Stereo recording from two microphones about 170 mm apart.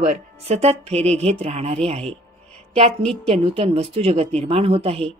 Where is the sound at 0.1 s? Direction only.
40° right (ahead or behind).